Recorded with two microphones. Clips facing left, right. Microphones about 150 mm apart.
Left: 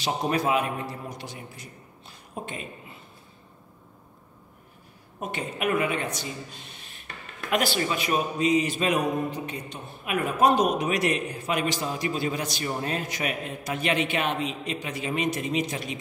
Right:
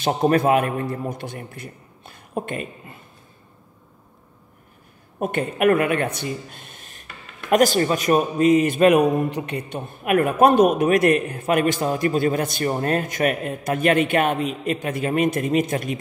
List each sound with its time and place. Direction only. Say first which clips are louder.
0.0 s a man's voice: right 8 dB; 55° right (ahead or behind)
5.2 s a man's voice: right 9 dB; 55° right (ahead or behind)